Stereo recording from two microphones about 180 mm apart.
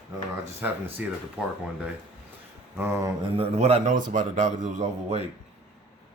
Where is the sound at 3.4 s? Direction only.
35° right (ahead or behind).